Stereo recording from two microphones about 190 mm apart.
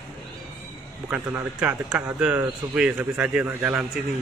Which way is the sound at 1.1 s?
10° right (ahead or behind).